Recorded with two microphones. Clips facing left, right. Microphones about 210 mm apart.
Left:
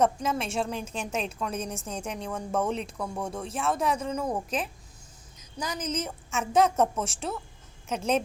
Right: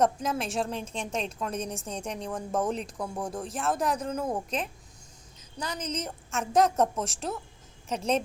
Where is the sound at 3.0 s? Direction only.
15° right (ahead or behind).